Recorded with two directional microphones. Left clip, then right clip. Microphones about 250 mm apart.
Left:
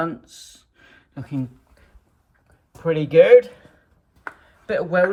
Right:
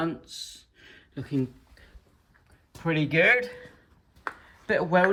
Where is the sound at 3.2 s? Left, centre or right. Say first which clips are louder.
Left 9 dB; centre.